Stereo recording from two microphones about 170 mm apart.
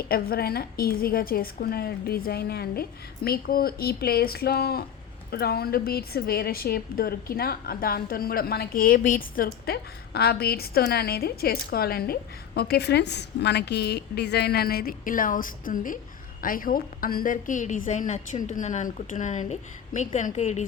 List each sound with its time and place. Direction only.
0.0 s a woman's voice: 65° left (ahead or behind)
12.5 s a woman's voice: 75° left (ahead or behind); by 20.7 s 40° left (ahead or behind)